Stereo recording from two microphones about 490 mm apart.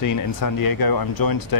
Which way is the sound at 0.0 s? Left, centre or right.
Left.